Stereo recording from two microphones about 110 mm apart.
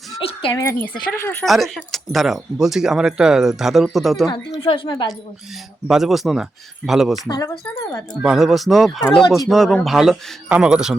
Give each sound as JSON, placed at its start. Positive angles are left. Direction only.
{"t": 0.2, "sound": "a sound", "side_deg": 60}
{"t": 0.5, "sound": "speech", "side_deg": 20}
{"t": 1.5, "sound": "speech", "side_deg": 0}
{"t": 4.6, "sound": "speech", "side_deg": 55}
{"t": 5.9, "sound": "speech", "side_deg": -5}
{"t": 7.3, "sound": "speech", "side_deg": 35}
{"t": 8.2, "sound": "a man's voice", "side_deg": -5}